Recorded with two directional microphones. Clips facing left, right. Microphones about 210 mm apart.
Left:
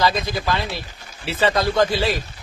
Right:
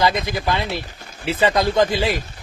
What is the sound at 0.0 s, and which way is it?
Speech, 20° right (ahead or behind).